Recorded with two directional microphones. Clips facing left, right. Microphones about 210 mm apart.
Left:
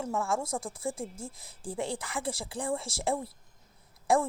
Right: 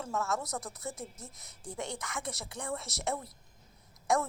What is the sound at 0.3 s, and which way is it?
Speech, 30° left (ahead or behind).